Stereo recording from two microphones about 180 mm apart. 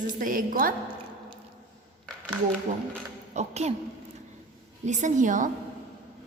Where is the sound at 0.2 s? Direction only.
50° right (ahead or behind).